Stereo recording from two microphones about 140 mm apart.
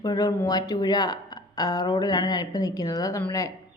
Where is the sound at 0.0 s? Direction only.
30° left (ahead or behind).